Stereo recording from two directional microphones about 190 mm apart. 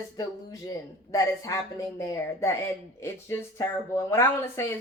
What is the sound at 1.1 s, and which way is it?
Speech, 15° left (ahead or behind).